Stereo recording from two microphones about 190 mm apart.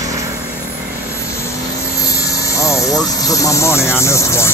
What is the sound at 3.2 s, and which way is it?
Speech, 15° left (ahead or behind).